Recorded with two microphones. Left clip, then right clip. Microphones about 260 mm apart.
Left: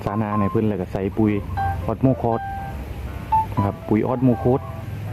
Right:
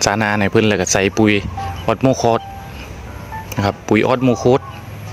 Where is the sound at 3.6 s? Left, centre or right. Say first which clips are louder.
Right 7 dB; right.